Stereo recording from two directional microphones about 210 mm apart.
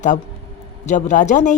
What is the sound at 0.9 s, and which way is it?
Speech, 35° left (ahead or behind).